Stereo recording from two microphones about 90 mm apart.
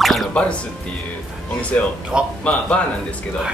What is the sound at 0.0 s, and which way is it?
Music, centre (ahead or behind).